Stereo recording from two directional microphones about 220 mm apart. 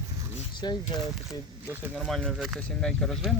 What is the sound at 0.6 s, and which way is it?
Speech, 20° left (ahead or behind).